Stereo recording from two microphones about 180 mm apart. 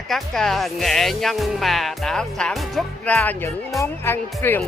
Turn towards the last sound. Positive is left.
turn(degrees=10)  # may be behind; listen again after turning